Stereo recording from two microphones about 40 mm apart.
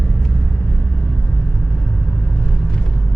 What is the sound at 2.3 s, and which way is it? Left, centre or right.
Vehicle, left.